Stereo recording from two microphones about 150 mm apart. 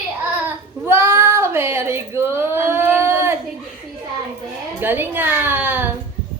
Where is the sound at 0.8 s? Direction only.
15° right (ahead or behind).